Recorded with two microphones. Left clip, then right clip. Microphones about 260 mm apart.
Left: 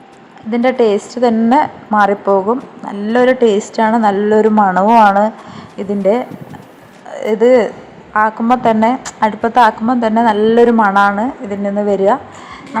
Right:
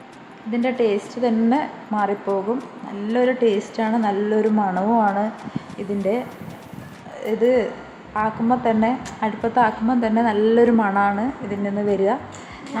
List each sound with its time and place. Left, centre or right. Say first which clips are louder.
0.5 s a woman's voice: left 8 dB; centre
7.1 s a woman's voice: left 9 dB; centre